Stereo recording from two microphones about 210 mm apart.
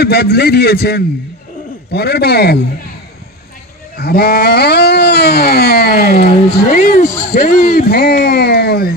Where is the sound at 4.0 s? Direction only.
50° left (ahead or behind).